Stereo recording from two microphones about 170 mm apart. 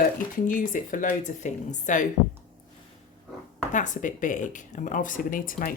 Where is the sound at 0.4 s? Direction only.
50° left (ahead or behind).